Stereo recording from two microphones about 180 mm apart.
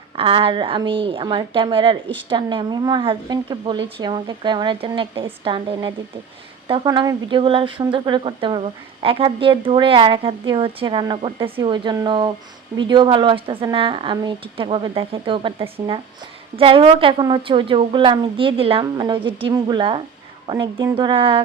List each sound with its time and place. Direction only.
0.2 s speech: 30° right (ahead or behind)